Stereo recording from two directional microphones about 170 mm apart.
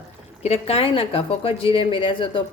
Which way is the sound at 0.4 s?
35° left (ahead or behind).